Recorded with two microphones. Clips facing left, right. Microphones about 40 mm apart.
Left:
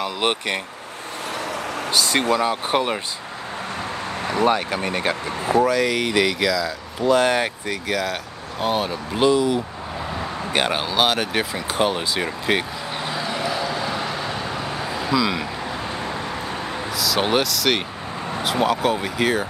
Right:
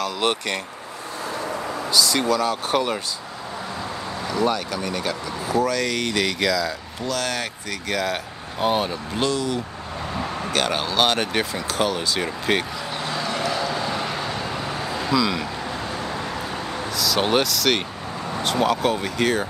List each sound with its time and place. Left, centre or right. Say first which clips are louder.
0.0 s speech: left 1 dB; left
1.4 s vehicle: left 1 dB; left
1.9 s speech: left 1 dB; left
2.4 s speech: left 1 dB; left
4.3 s speech: left 3 dB; left
5.6 s speech: left 3 dB; centre
7.0 s speech: left 9 dB; left
7.9 s speech: right 1 dB; centre
9.1 s speech: left 7 dB; centre
11.7 s vehicle: left 2 dB; centre
16.9 s speech: even; centre